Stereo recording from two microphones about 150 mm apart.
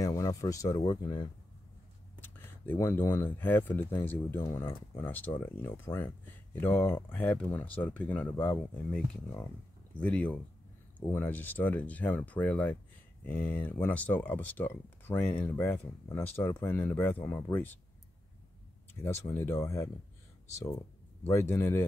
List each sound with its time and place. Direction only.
0.0 s speech: 25° left (ahead or behind)
2.2 s speech: 15° left (ahead or behind)
19.0 s speech: 15° left (ahead or behind)